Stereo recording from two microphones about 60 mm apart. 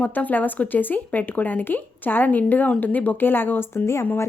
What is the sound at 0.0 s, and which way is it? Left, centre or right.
Speech, left.